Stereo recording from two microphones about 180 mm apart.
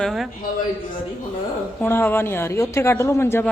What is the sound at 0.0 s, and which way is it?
Speech, centre (ahead or behind).